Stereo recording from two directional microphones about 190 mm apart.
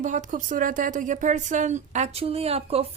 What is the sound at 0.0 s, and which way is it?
A woman's voice, 40° right (ahead or behind).